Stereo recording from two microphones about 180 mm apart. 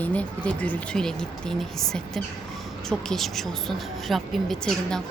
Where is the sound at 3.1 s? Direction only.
Centre (ahead or behind).